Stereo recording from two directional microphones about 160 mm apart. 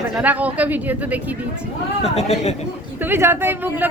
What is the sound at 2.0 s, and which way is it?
Speech, 40° left (ahead or behind).